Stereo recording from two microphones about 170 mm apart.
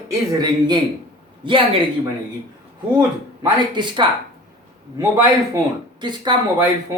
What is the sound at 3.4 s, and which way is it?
Speech, 25° right (ahead or behind).